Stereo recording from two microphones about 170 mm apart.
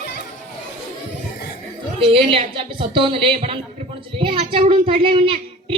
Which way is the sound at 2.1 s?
30° right (ahead or behind).